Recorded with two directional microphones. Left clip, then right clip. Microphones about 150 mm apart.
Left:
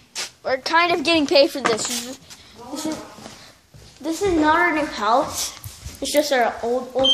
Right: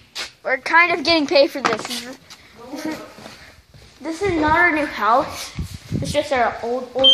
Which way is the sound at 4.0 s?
Centre (ahead or behind).